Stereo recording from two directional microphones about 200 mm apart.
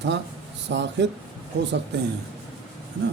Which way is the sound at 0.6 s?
65° right (ahead or behind).